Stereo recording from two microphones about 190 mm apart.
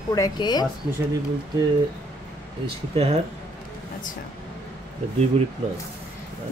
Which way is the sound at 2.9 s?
35° right (ahead or behind).